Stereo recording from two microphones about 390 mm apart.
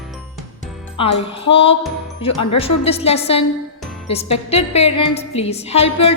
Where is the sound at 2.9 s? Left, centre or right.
Centre.